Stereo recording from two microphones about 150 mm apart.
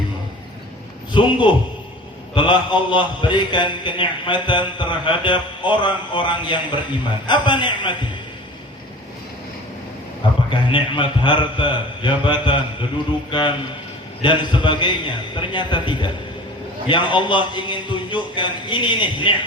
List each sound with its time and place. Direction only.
1.1 s a man's voice: 30° left (ahead or behind)
10.5 s a man's voice: 30° left (ahead or behind)
14.2 s a man's voice: 30° left (ahead or behind)